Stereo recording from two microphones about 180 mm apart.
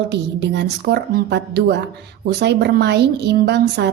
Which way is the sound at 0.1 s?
70° right (ahead or behind).